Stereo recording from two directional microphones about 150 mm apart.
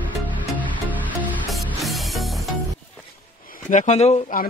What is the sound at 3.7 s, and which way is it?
Speech, 55° left (ahead or behind).